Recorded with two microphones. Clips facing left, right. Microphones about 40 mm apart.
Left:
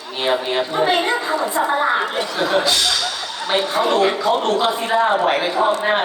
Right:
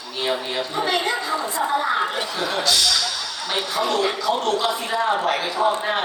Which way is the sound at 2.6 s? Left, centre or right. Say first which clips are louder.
Even; left.